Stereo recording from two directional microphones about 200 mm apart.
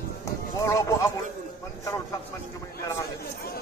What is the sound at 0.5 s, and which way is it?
Speech, 15° left (ahead or behind).